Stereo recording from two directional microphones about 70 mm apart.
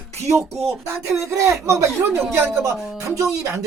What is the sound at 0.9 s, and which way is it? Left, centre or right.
Speech, right.